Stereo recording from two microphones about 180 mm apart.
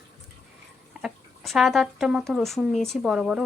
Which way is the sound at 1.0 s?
Centre (ahead or behind).